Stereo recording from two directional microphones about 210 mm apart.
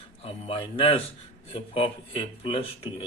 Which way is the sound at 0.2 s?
25° left (ahead or behind).